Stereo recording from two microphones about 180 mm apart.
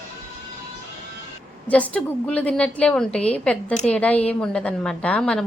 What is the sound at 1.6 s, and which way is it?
A woman's voice, 10° left (ahead or behind).